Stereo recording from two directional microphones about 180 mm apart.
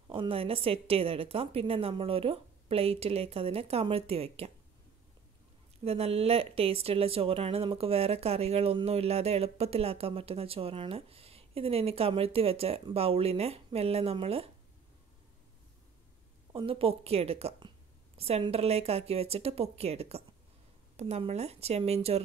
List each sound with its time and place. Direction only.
0.1 s speech: 30° right (ahead or behind)
5.9 s speech: 35° right (ahead or behind)
16.5 s speech: 30° right (ahead or behind)